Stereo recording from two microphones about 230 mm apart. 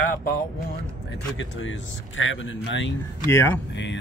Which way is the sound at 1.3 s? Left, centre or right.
Left.